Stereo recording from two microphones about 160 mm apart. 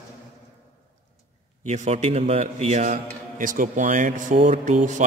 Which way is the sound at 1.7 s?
45° right (ahead or behind).